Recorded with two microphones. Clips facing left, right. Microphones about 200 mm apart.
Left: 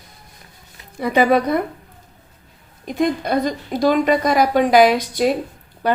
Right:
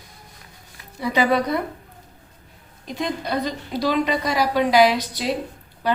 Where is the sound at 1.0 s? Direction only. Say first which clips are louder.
Left 4 dB; 50° left (ahead or behind).